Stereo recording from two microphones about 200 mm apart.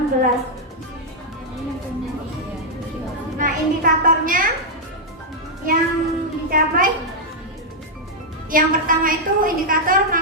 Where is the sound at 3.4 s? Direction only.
45° right (ahead or behind).